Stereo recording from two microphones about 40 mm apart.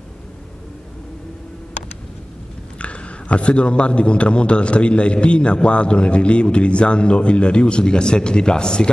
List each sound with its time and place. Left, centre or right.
2.8 s a man's voice: left